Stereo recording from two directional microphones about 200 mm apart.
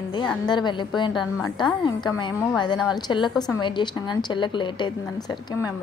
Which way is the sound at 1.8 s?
20° left (ahead or behind).